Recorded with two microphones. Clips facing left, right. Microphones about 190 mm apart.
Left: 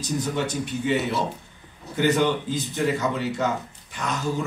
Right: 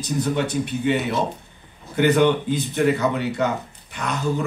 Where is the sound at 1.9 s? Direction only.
60° right (ahead or behind).